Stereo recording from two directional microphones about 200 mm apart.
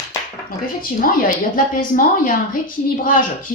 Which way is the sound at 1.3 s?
45° left (ahead or behind).